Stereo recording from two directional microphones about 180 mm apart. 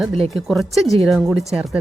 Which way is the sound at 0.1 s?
30° right (ahead or behind).